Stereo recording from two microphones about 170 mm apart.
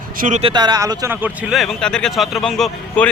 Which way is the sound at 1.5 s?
Centre (ahead or behind).